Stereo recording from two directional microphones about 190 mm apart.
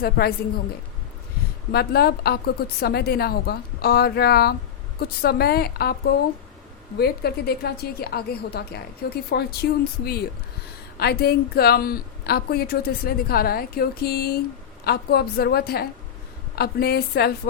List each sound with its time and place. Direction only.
0.0 s a woman's voice: 55° left (ahead or behind)
1.7 s a woman's voice: 55° left (ahead or behind)
7.0 s a woman's voice: 55° left (ahead or behind)